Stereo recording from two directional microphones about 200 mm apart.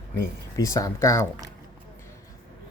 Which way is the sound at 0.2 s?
15° left (ahead or behind).